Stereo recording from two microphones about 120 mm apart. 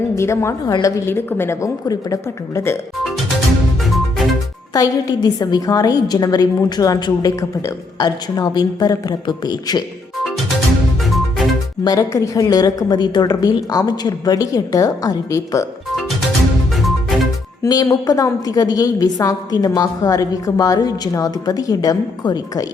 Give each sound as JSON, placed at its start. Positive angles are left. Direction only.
{"t": 0.2, "sound": "a woman's voice", "side_deg": 25}
{"t": 4.7, "sound": "a woman's voice", "side_deg": 30}
{"t": 11.0, "sound": "music", "side_deg": 0}
{"t": 11.8, "sound": "a woman's voice", "side_deg": 30}
{"t": 16.7, "sound": "music", "side_deg": 0}
{"t": 17.6, "sound": "a woman's voice", "side_deg": 30}